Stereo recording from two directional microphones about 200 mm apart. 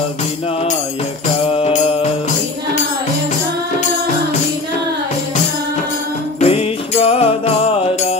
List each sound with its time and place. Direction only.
1.5 s music: 35° left (ahead or behind)
6.4 s music: 30° left (ahead or behind)